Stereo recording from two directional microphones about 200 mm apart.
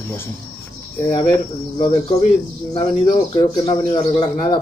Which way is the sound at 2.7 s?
25° left (ahead or behind).